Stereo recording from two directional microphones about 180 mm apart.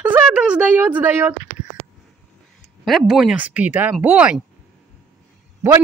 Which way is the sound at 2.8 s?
Centre (ahead or behind).